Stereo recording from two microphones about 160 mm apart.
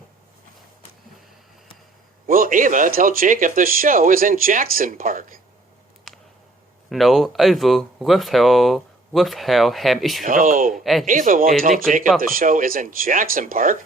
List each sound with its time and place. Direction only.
2.2 s speech: 60° right (ahead or behind)
6.9 s speech: centre (ahead or behind)
10.2 s speech: 55° right (ahead or behind)